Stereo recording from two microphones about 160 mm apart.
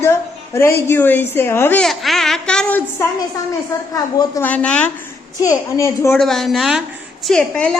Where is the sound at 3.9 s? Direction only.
20° left (ahead or behind).